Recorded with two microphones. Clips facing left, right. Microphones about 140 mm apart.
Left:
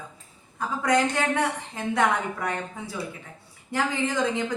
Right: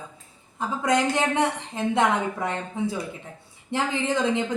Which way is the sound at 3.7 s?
25° right (ahead or behind).